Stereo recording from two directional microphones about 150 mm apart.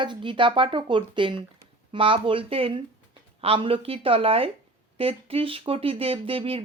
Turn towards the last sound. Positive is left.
turn(degrees=-40)  # may be behind; listen again after turning